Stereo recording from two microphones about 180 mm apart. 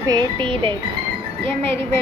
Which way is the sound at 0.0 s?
20° right (ahead or behind).